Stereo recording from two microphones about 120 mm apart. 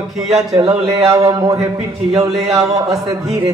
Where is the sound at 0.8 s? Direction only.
25° right (ahead or behind).